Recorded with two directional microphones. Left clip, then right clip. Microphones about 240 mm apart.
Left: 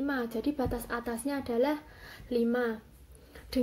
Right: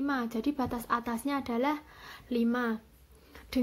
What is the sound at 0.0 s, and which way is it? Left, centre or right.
Speech, right.